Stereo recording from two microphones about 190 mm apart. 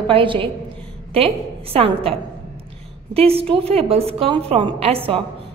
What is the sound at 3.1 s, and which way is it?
A woman's voice, 30° right (ahead or behind).